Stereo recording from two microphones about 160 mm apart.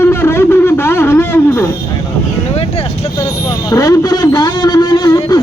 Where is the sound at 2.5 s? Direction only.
40° left (ahead or behind).